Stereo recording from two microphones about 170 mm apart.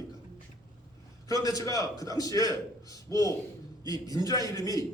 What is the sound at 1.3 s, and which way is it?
A man's voice, 20° left (ahead or behind).